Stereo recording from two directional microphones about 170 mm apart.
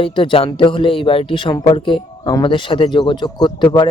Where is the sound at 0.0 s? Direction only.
30° left (ahead or behind).